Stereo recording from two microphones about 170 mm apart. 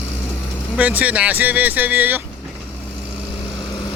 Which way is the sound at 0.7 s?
10° right (ahead or behind).